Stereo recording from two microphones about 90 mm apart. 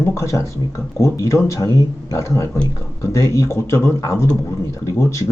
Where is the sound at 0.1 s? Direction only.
30° left (ahead or behind).